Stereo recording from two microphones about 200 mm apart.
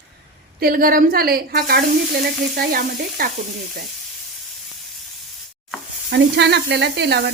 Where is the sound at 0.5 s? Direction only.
45° right (ahead or behind).